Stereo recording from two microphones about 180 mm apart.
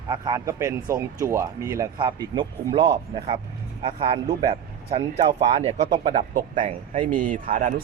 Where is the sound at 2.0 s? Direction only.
25° right (ahead or behind).